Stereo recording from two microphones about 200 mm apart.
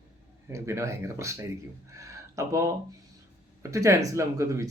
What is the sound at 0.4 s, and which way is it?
Speech, 15° right (ahead or behind).